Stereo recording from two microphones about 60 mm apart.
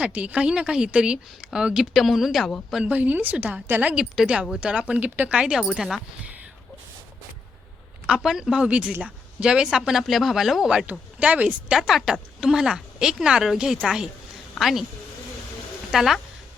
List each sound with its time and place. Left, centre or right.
0.0 s a woman's voice: right; by 2.5 s centre
2.8 s speech: right
3.9 s a woman's voice: centre
5.3 s a woman's voice: centre
8.0 s a woman's voice: centre
10.8 s speech: right
11.8 s a woman's voice: centre
15.9 s speech: centre